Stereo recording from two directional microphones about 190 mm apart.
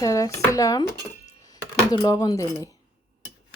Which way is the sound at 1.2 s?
20° left (ahead or behind).